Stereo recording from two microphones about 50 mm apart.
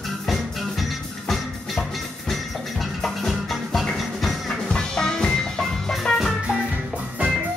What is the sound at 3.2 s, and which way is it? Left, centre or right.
Music, centre.